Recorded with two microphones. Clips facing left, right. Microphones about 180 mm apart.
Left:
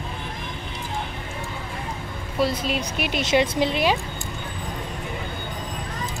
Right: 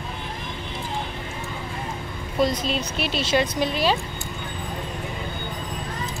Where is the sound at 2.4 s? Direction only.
10° left (ahead or behind).